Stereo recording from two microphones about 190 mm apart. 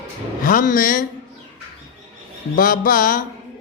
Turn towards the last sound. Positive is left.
turn(degrees=45)  # may be behind; listen again after turning